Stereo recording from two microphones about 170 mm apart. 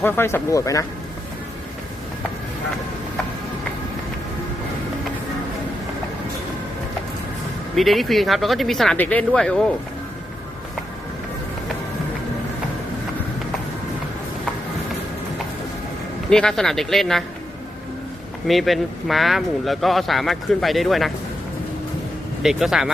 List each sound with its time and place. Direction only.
0.0 s speech: 15° left (ahead or behind)
7.8 s speech: centre (ahead or behind)
16.3 s speech: 5° left (ahead or behind)
18.4 s speech: centre (ahead or behind)
22.4 s speech: centre (ahead or behind)